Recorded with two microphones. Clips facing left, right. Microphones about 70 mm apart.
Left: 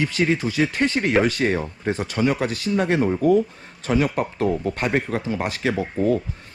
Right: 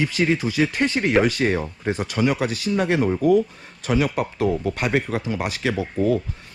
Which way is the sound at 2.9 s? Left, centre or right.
Left.